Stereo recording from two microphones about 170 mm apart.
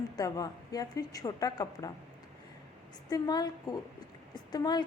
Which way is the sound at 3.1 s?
25° left (ahead or behind).